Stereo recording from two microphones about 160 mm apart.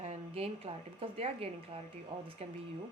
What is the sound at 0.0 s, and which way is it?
A woman's voice, 45° right (ahead or behind).